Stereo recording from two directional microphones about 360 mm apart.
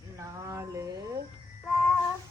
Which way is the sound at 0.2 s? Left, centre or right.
Centre.